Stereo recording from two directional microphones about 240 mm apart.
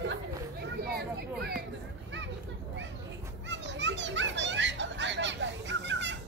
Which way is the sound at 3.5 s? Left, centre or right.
Right.